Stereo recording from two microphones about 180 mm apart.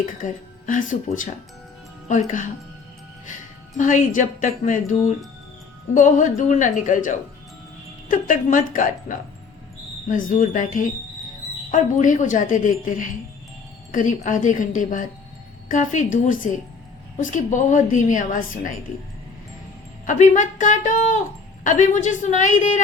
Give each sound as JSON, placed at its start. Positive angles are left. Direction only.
{"t": 0.0, "sound": "speech", "side_deg": 45}
{"t": 3.8, "sound": "speech", "side_deg": 45}
{"t": 20.1, "sound": "speech", "side_deg": 45}